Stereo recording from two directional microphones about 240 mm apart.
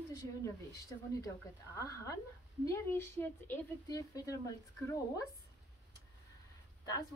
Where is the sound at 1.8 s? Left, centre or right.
Centre.